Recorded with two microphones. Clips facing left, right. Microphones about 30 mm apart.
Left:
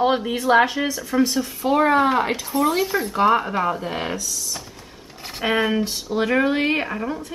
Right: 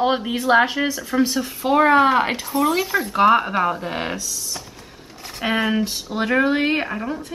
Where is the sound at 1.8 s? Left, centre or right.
Right.